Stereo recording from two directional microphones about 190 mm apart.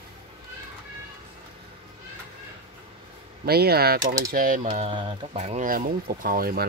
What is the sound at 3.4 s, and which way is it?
Speech, 55° right (ahead or behind).